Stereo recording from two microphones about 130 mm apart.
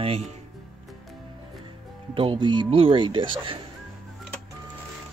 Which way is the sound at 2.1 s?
40° right (ahead or behind).